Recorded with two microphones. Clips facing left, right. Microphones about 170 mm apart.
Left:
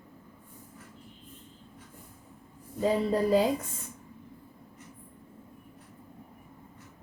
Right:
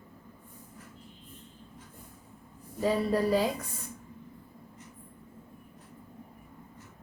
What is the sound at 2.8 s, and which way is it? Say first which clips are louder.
Speech: left 1 dB; 20° left (ahead or behind).